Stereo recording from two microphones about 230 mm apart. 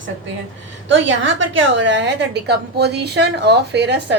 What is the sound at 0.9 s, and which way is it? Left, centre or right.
A woman's voice, right.